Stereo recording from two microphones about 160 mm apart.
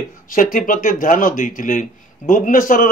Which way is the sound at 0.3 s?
60° left (ahead or behind).